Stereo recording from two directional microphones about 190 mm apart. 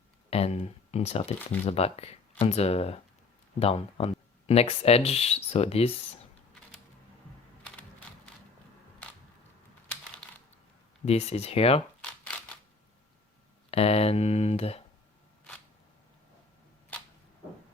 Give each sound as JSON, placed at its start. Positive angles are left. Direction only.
{"t": 0.3, "sound": "speech", "side_deg": 30}
{"t": 10.2, "sound": "coin", "side_deg": 5}
{"t": 11.0, "sound": "speech", "side_deg": 35}
{"t": 13.7, "sound": "speech", "side_deg": 30}